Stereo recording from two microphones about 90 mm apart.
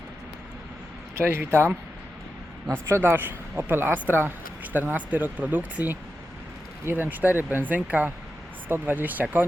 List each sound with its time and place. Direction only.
1.1 s speech: 25° right (ahead or behind)
2.6 s a woman's voice: 30° right (ahead or behind)